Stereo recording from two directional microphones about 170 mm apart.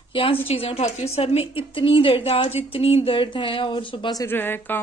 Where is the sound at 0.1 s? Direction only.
30° left (ahead or behind).